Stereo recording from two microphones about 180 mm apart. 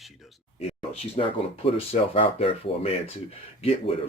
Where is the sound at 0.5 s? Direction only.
35° left (ahead or behind).